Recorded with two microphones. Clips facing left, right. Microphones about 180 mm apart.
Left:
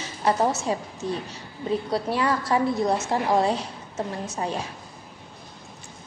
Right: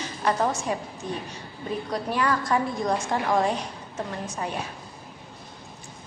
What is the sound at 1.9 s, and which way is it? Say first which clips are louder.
A woman's voice: right 1 dB; 30° left (ahead or behind).